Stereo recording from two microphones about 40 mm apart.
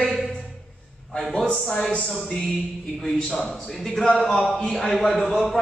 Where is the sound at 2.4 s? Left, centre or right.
Centre.